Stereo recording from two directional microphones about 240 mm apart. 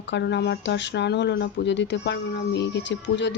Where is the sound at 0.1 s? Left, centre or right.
Left.